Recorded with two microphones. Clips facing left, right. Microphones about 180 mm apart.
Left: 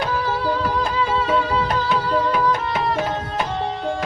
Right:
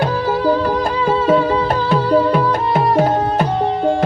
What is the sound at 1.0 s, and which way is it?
Music, 45° right (ahead or behind).